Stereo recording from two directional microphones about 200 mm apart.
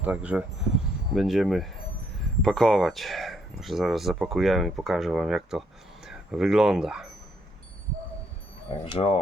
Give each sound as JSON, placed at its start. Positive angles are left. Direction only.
{"t": 0.0, "sound": "speech", "side_deg": -5}
{"t": 8.7, "sound": "speech", "side_deg": 25}